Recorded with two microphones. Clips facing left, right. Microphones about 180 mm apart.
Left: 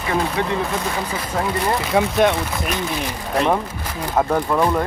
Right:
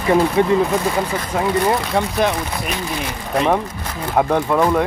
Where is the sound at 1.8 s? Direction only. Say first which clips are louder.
Left 2 dB; centre (ahead or behind).